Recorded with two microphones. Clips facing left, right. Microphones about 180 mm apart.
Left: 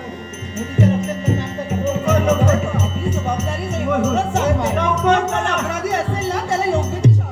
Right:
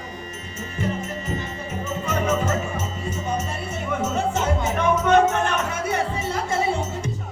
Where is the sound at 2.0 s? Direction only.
75° left (ahead or behind).